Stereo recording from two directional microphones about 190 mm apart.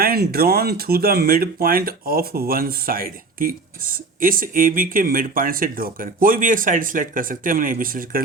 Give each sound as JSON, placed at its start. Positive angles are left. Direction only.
{"t": 0.0, "sound": "speech", "side_deg": -50}